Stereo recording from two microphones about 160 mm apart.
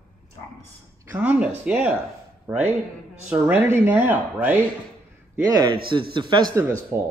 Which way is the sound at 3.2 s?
10° right (ahead or behind).